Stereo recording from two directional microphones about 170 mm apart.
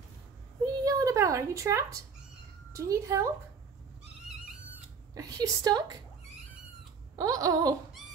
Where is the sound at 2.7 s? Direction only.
20° right (ahead or behind).